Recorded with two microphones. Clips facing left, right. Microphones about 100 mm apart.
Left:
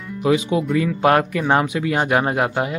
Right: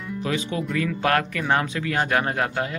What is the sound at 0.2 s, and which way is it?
Speech, 15° left (ahead or behind).